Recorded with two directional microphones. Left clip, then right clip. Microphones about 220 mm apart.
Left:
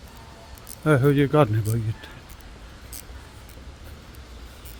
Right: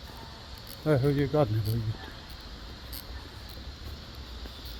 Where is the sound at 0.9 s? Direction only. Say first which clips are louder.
Left 7 dB; 40° left (ahead or behind).